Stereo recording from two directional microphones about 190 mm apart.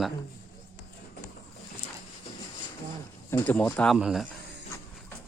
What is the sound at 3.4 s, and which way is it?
Speech, 10° left (ahead or behind).